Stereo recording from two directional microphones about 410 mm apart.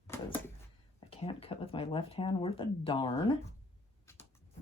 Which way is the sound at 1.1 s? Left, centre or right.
Centre.